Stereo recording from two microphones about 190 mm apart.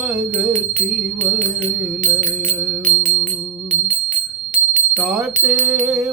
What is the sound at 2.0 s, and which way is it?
Music, 40° right (ahead or behind).